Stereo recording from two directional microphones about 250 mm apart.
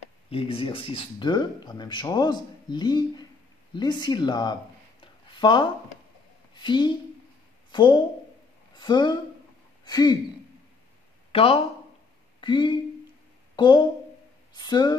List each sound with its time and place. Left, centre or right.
0.3 s speech: left
5.0 s a sound: centre
6.6 s speech: centre
11.3 s speech: left